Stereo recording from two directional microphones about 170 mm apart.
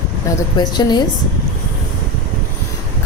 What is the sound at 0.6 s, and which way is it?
Speech, 25° left (ahead or behind).